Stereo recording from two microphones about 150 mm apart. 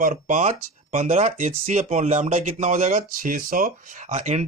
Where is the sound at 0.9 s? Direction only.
45° right (ahead or behind); by 3.7 s 65° right (ahead or behind).